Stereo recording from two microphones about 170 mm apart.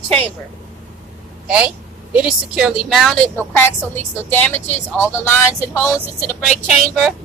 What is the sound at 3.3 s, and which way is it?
A woman's voice, 10° left (ahead or behind).